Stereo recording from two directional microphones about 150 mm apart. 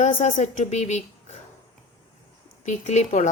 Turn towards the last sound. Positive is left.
turn(degrees=50)  # may be behind; listen again after turning